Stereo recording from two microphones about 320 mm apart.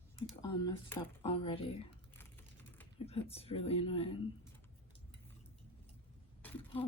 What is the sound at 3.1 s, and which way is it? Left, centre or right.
Speech, centre.